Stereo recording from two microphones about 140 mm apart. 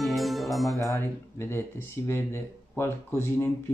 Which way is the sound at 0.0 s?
Centre (ahead or behind).